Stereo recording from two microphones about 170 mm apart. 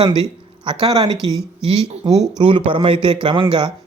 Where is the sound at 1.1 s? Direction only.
20° left (ahead or behind).